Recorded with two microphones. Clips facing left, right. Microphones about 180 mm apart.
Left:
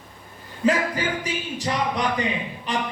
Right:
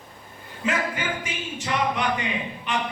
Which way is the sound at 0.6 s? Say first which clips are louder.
Left 5 dB; 35° left (ahead or behind).